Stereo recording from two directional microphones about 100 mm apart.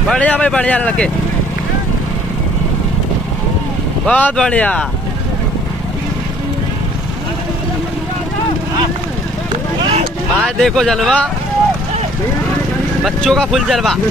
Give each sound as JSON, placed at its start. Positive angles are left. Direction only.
{"t": 0.1, "sound": "speech", "side_deg": 15}
{"t": 4.0, "sound": "speech", "side_deg": 10}
{"t": 10.4, "sound": "speech", "side_deg": 5}
{"t": 13.0, "sound": "speech", "side_deg": 5}